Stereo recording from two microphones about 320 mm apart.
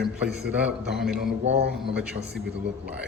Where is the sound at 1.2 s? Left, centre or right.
Right.